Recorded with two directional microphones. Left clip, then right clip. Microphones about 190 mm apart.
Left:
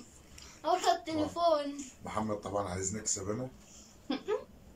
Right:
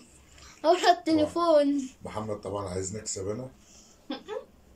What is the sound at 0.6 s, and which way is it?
A woman's voice, 55° right (ahead or behind).